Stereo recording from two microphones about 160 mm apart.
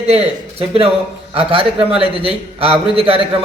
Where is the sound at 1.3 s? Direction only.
35° right (ahead or behind).